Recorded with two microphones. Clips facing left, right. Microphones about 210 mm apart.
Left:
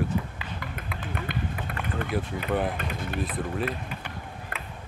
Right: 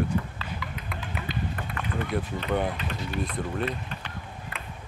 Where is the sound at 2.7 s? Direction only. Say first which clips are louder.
Even; 55° left (ahead or behind).